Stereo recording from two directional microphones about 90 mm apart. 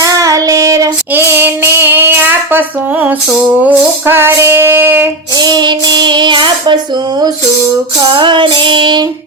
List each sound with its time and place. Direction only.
0.0 s child singing: 40° right (ahead or behind)
1.1 s child singing: 25° right (ahead or behind)
3.7 s music: 25° right (ahead or behind)
5.4 s child singing: 55° right (ahead or behind)
8.1 s child singing: 60° right (ahead or behind)